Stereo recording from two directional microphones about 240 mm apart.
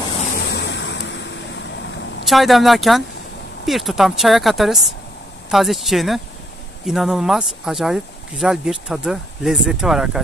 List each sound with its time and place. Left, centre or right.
0.5 s vehicle: left
2.2 s speech: centre